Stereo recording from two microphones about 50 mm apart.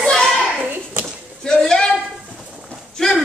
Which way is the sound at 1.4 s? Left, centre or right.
Centre.